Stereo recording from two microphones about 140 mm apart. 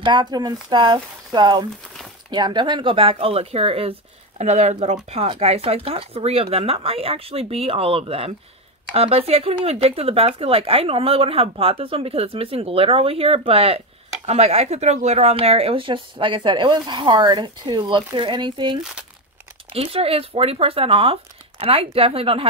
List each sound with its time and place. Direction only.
0.0 s speech: 30° right (ahead or behind)